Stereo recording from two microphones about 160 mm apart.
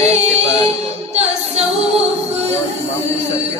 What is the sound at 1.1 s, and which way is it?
A capella, 40° right (ahead or behind).